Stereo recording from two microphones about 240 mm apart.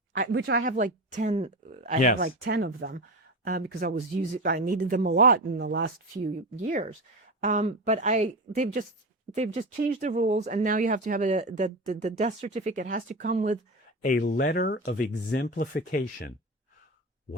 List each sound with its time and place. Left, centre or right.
0.2 s speech: right
2.1 s speech: right
7.4 s speech: right
14.0 s speech: left